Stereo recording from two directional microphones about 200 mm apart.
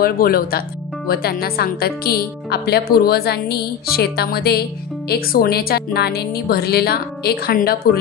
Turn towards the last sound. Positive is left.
turn(degrees=50)  # may be behind; listen again after turning